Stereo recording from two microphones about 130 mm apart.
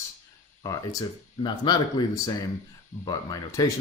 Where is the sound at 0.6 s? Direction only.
25° left (ahead or behind).